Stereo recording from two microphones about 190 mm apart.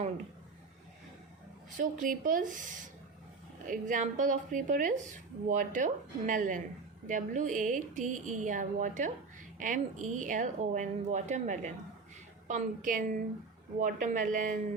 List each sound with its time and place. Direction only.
1.8 s a woman's voice: 45° right (ahead or behind)